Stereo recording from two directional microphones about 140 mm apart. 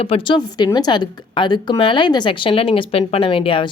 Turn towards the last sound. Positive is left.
turn(degrees=40)  # may be behind; listen again after turning